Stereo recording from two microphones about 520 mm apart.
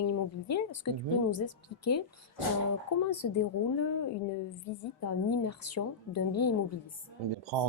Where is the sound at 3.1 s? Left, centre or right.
Left.